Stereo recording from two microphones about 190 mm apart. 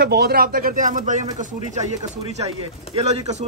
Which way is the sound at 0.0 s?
55° right (ahead or behind).